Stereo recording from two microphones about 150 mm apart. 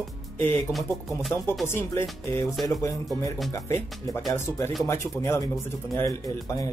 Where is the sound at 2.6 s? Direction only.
20° left (ahead or behind).